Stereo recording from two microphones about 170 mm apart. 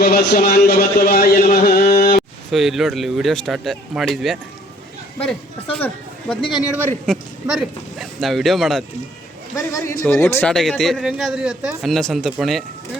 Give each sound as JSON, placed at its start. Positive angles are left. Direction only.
{"t": 0.2, "sound": "speech", "side_deg": 65}
{"t": 2.5, "sound": "speech", "side_deg": 0}
{"t": 9.6, "sound": "speech", "side_deg": 15}
{"t": 10.5, "sound": "speech", "side_deg": 0}